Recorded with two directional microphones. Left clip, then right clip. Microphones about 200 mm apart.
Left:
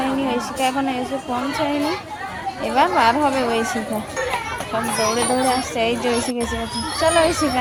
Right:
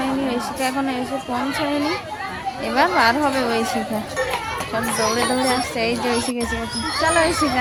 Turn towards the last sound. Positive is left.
turn(degrees=0)  # may be behind; listen again after turning